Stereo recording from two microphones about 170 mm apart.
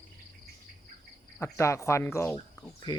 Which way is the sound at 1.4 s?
15° left (ahead or behind).